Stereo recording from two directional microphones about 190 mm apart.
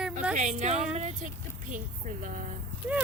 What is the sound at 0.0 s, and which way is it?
Music, 5° right (ahead or behind).